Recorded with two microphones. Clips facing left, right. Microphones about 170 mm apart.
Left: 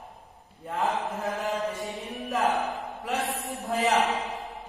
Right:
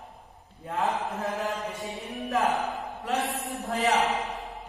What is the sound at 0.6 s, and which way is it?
Mantra, centre (ahead or behind).